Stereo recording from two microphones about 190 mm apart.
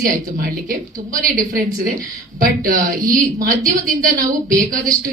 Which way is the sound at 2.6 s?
45° right (ahead or behind).